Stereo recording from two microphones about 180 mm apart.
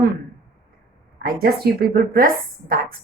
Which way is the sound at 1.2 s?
60° right (ahead or behind).